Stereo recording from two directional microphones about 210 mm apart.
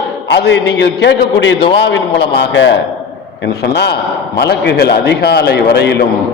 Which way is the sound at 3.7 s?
50° left (ahead or behind).